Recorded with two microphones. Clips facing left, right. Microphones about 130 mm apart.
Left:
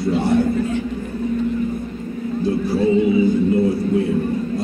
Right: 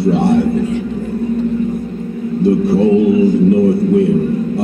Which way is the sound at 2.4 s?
60° right (ahead or behind).